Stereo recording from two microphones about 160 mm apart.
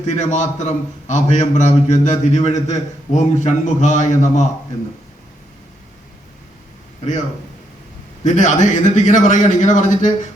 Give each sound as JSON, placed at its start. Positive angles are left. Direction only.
{"t": 0.0, "sound": "a man's voice", "side_deg": 45}
{"t": 8.2, "sound": "a man's voice", "side_deg": 50}